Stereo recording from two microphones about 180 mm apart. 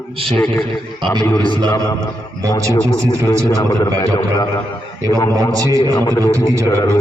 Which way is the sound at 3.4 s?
20° left (ahead or behind).